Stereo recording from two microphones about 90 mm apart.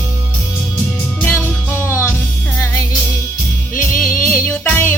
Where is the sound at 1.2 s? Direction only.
15° left (ahead or behind).